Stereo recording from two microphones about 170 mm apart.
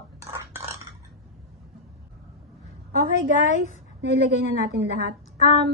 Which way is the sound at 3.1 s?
45° left (ahead or behind).